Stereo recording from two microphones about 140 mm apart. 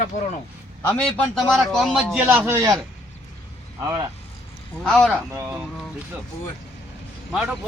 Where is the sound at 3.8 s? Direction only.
25° right (ahead or behind).